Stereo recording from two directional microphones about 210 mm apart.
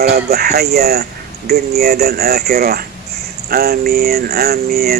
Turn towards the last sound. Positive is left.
turn(degrees=-50)  # may be behind; listen again after turning